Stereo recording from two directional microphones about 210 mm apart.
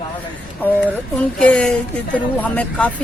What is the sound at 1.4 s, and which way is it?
Speech, 5° left (ahead or behind).